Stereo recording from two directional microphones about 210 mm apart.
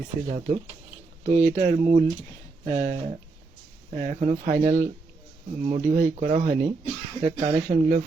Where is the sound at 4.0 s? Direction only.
35° right (ahead or behind).